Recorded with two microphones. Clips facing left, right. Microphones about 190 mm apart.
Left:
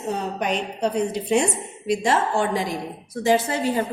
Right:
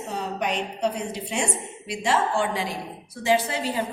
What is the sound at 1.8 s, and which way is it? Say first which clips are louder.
A woman's voice: left 3 dB; 40° left (ahead or behind).